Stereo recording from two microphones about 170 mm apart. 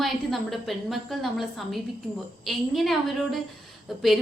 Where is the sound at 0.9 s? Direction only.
Centre (ahead or behind).